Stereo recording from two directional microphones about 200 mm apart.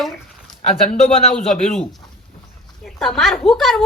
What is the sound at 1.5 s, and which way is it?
A woman's voice, centre (ahead or behind).